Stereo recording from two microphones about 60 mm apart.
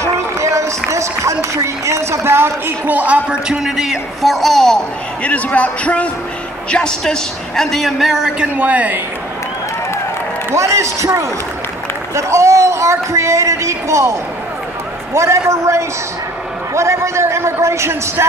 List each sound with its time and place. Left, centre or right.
0.0 s run: right
2.9 s a woman's voice: right
3.3 s a man's voice: centre
5.2 s a man's voice: left
6.7 s a man's voice: centre
8.5 s a woman's voice: right
10.5 s speech: right
15.1 s a man's voice: right